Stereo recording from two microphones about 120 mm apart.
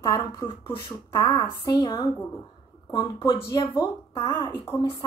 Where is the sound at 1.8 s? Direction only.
35° left (ahead or behind).